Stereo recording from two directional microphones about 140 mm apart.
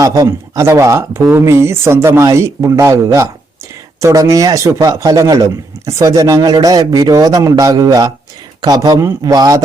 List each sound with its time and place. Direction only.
0.0 s a man's voice: 25° right (ahead or behind)